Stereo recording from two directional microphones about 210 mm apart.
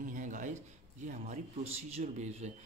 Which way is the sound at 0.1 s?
40° right (ahead or behind).